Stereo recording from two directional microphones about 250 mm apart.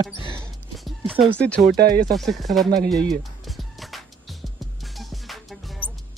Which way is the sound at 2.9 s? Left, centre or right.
Centre.